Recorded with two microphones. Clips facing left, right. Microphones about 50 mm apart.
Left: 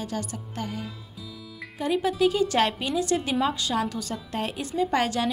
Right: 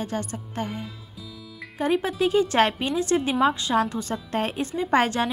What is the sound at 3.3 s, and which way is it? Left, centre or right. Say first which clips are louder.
Speech: right 4 dB; centre.